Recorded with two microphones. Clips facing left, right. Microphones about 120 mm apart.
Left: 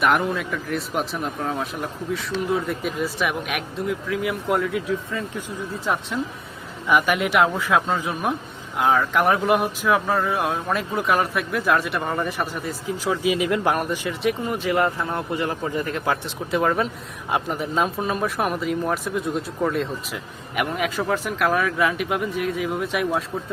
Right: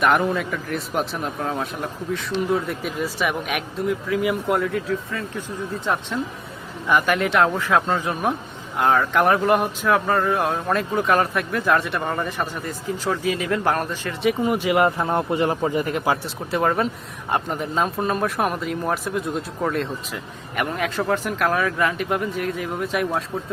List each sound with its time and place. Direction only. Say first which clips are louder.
0.0 s speech: right 1 dB; centre (ahead or behind)
5.8 s speech: even; centre (ahead or behind)
14.2 s a man's voice: right 6 dB; 5° right (ahead or behind)
16.5 s speech: even; centre (ahead or behind)